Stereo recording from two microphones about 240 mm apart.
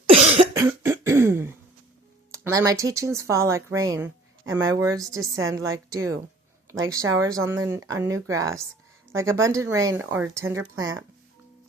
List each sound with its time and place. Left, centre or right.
0.1 s cough: right
0.5 s cough: centre
2.3 s speech: centre